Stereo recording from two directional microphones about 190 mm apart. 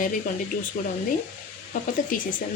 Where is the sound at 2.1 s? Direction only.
45° left (ahead or behind).